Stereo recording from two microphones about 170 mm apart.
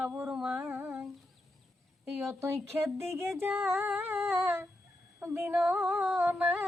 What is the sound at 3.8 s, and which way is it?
Humming, 10° right (ahead or behind).